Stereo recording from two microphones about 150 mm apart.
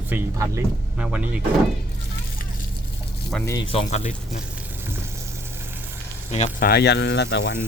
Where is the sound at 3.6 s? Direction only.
45° left (ahead or behind).